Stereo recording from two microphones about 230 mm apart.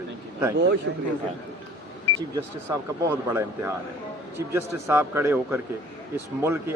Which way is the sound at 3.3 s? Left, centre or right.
Centre.